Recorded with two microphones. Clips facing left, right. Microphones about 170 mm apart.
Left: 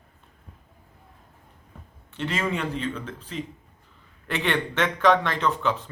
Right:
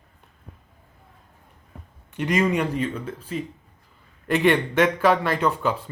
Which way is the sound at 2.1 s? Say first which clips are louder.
Right 6 dB; 15° right (ahead or behind).